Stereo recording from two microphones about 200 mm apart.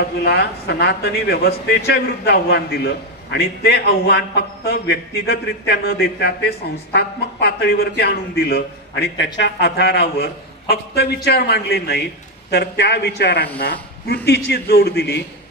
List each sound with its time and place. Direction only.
0.2 s a man's voice: 55° left (ahead or behind)